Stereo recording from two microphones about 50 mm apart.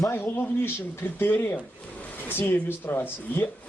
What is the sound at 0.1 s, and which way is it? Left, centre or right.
Speech, left.